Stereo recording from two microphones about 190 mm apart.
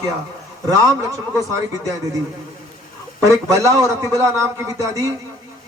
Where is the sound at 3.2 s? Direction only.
15° right (ahead or behind).